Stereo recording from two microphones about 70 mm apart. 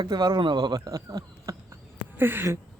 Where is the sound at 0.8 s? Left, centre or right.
Right.